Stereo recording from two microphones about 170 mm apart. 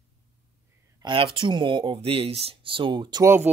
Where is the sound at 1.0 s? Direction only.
30° right (ahead or behind).